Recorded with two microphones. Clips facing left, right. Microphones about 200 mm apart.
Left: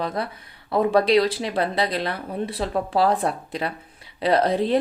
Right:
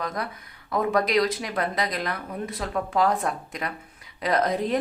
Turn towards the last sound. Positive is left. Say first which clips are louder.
# left 4 dB
turn(degrees=30)  # may be behind; listen again after turning